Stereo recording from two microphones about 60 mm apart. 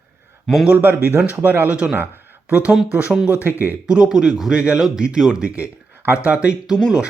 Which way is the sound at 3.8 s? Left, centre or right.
Centre.